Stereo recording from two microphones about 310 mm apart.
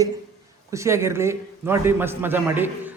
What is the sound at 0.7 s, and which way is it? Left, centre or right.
A man's voice, centre.